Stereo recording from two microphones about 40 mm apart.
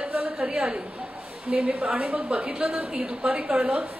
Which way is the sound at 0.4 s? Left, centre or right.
Right.